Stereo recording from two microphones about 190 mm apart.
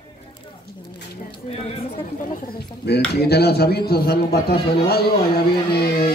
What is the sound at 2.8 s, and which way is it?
A man's voice, 60° left (ahead or behind).